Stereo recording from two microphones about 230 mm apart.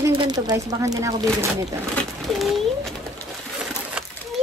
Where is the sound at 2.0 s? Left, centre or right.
Centre.